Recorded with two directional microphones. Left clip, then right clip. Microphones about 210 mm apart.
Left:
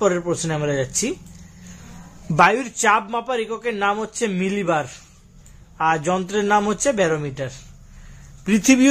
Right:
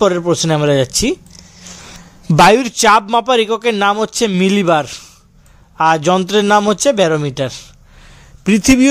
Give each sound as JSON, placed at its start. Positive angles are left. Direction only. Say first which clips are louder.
{"t": 0.0, "sound": "a man's voice", "louder": "right 7 dB", "side_deg": -45}
{"t": 2.3, "sound": "a man's voice", "louder": "right 7 dB", "side_deg": -45}
{"t": 8.5, "sound": "speech", "louder": "right 5 dB", "side_deg": -35}